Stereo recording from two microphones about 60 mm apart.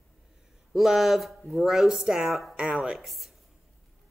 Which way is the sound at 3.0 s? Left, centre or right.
Centre.